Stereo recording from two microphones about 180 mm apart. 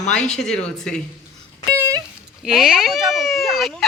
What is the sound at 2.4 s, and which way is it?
Speech, centre (ahead or behind).